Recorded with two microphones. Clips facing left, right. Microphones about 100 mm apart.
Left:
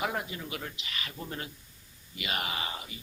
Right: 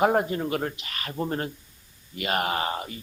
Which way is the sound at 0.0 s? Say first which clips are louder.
Right 12 dB; 45° right (ahead or behind).